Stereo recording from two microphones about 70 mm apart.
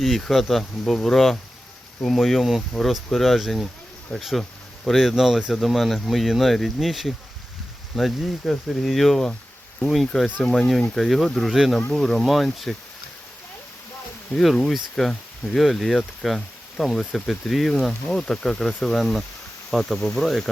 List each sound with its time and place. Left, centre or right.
0.0 s speech: centre
10.2 s speech: left
10.7 s speech: centre
14.3 s speech: centre